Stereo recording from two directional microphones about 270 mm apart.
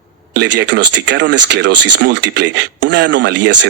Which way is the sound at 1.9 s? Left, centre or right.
Right.